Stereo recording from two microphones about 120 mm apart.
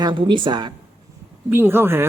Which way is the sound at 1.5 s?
20° right (ahead or behind).